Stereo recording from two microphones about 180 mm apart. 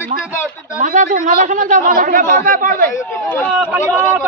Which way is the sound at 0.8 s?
45° right (ahead or behind).